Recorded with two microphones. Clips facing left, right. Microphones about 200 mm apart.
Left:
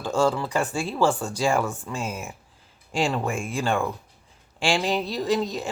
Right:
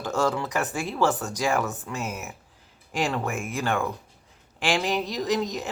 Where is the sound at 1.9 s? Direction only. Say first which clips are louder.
Left 1 dB; 5° right (ahead or behind).